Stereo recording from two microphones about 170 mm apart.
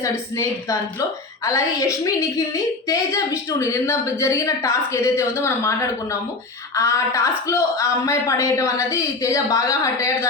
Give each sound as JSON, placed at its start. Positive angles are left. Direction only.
{"t": 0.0, "sound": "a woman's voice", "side_deg": 20}